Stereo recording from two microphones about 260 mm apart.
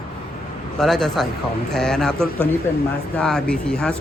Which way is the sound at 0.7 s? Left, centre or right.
Centre.